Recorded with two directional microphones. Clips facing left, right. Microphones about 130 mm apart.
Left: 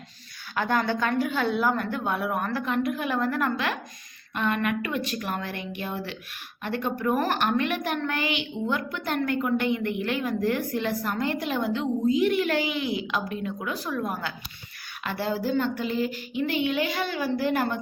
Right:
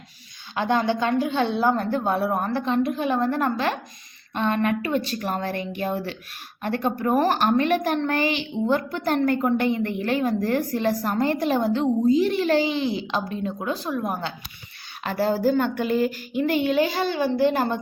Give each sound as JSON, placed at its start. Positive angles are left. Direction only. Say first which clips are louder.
{"t": 0.5, "sound": "a woman's voice", "louder": "right 3 dB", "side_deg": -20}
{"t": 15.0, "sound": "a woman's voice", "louder": "right 6 dB", "side_deg": -40}